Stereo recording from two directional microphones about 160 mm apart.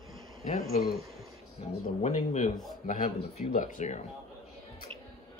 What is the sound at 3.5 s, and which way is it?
Speech, 55° left (ahead or behind).